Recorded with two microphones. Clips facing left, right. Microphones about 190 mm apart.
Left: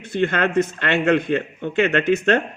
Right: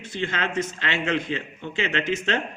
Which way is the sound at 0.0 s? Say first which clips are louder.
Left 8 dB; 60° left (ahead or behind).